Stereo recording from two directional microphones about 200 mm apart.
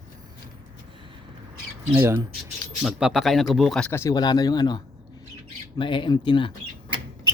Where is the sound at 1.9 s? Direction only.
15° right (ahead or behind).